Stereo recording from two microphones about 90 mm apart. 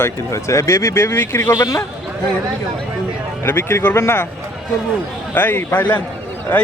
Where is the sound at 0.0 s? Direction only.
35° left (ahead or behind).